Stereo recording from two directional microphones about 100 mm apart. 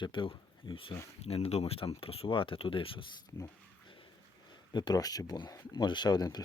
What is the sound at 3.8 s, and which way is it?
Dog, 60° left (ahead or behind).